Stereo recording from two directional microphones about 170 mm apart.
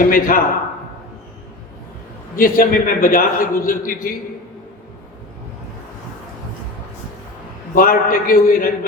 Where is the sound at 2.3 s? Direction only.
55° left (ahead or behind).